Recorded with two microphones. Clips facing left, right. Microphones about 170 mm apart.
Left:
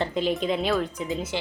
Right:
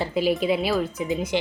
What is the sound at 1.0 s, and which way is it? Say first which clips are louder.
Speech: right 4 dB; 15° right (ahead or behind).